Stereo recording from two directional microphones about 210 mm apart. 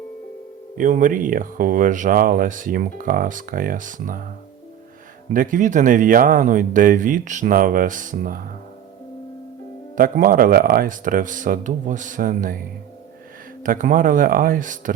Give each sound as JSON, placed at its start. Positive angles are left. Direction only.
{"t": 0.8, "sound": "speech", "side_deg": -40}
{"t": 5.3, "sound": "speech", "side_deg": -40}
{"t": 9.9, "sound": "speech", "side_deg": -40}
{"t": 13.6, "sound": "speech", "side_deg": -40}